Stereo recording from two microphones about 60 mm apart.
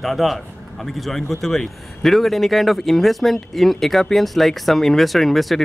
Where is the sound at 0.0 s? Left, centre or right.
Centre.